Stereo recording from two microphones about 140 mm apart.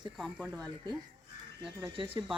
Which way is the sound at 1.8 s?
40° right (ahead or behind).